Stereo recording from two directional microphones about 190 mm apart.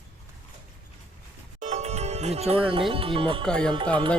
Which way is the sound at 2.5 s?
30° right (ahead or behind).